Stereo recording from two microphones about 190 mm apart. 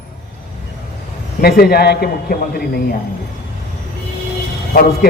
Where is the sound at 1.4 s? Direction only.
55° left (ahead or behind).